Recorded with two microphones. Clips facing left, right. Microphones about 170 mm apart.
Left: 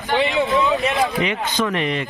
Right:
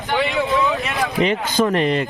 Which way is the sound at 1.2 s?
35° right (ahead or behind).